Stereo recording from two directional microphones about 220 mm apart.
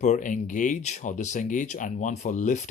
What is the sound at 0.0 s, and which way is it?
Speech, 35° left (ahead or behind).